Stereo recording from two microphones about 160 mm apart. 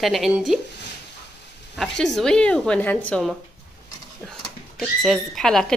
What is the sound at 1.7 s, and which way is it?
Speech, centre (ahead or behind).